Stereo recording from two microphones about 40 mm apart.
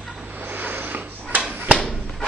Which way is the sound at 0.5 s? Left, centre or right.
Right.